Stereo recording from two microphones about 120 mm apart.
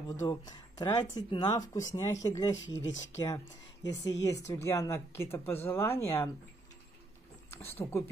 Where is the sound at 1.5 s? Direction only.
30° left (ahead or behind).